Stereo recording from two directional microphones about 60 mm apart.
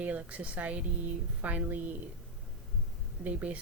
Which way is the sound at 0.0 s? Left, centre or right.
Right.